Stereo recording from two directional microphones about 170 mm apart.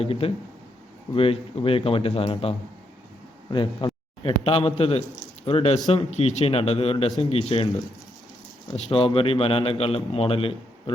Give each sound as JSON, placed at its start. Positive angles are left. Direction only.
{"t": 0.0, "sound": "a man's voice", "side_deg": 35}
{"t": 8.7, "sound": "a man's voice", "side_deg": 35}